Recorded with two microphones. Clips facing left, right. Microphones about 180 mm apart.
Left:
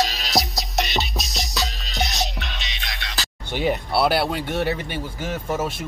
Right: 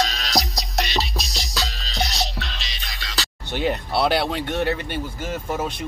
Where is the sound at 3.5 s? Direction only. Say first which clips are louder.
Left 1 dB; 10° left (ahead or behind).